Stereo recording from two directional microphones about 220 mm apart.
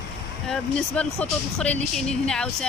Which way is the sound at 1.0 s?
5° left (ahead or behind).